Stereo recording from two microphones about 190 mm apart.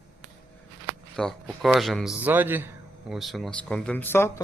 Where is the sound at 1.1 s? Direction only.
5° left (ahead or behind).